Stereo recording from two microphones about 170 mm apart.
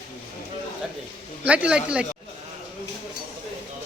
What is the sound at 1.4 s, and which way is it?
Speech, 10° right (ahead or behind).